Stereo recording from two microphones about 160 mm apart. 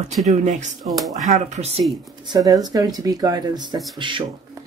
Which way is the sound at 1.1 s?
50° right (ahead or behind).